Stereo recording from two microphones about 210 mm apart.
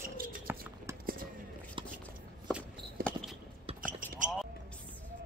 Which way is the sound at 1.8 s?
25° right (ahead or behind).